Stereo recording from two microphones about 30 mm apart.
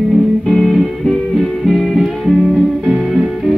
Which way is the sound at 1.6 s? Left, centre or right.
Centre.